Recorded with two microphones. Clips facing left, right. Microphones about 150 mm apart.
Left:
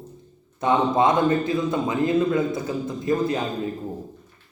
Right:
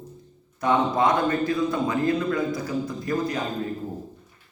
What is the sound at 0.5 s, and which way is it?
A man's voice, 25° left (ahead or behind).